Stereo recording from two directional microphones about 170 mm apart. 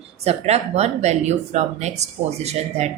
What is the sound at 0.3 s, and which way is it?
A woman's voice, 40° right (ahead or behind).